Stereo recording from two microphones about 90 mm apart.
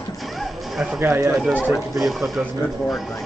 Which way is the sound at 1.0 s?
25° right (ahead or behind).